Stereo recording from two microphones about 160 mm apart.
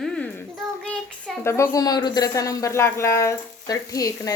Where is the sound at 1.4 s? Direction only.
15° left (ahead or behind).